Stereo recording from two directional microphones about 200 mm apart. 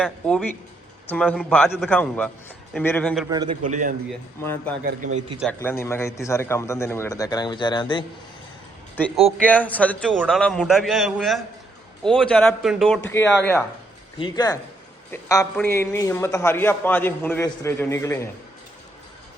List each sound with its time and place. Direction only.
0.0 s a man's voice: 5° left (ahead or behind)
3.2 s a man's voice: 20° right (ahead or behind)
3.7 s a man's voice: 40° right (ahead or behind)
4.4 s a man's voice: 10° left (ahead or behind)
4.8 s a man's voice: 40° right (ahead or behind)
5.5 s a man's voice: 10° left (ahead or behind)
9.0 s a man's voice: 5° left (ahead or behind)
13.0 s a man's voice: 10° left (ahead or behind)
14.2 s a man's voice: 20° left (ahead or behind)